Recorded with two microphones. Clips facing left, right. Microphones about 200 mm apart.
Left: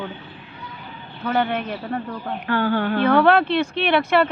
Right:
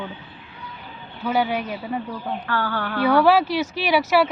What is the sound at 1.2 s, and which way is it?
Speech, 5° right (ahead or behind).